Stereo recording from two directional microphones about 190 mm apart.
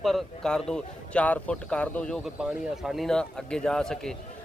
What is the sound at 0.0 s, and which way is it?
A man's voice, centre (ahead or behind).